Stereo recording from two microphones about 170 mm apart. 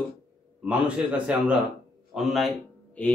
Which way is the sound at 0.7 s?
5° right (ahead or behind).